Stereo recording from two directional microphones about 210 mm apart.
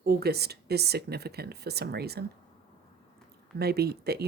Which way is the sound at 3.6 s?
50° right (ahead or behind).